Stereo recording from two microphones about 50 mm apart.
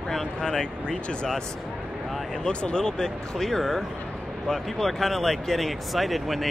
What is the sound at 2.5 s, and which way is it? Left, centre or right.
Speech, centre.